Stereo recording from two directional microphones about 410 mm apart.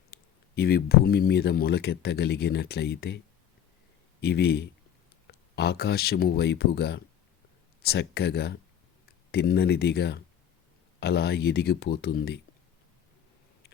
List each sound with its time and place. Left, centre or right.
0.1 s speech: left
4.2 s speech: left